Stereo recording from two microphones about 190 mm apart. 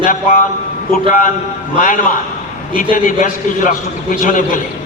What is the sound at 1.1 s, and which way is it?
Speech, 45° left (ahead or behind).